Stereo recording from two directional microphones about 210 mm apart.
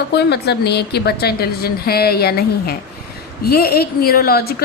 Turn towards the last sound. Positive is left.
turn(degrees=50)  # may be behind; listen again after turning